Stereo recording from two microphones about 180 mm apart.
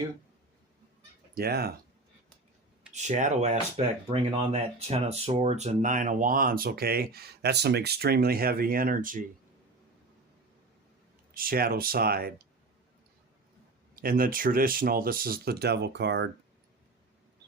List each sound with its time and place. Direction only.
1.4 s speech: 60° right (ahead or behind)
2.9 s speech: 40° right (ahead or behind)
11.3 s speech: 55° right (ahead or behind)
13.9 s speech: 55° right (ahead or behind); by 16.3 s 75° right (ahead or behind)